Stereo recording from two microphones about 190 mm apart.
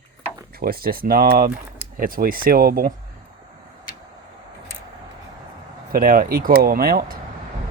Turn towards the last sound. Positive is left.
turn(degrees=-50)  # may be behind; listen again after turning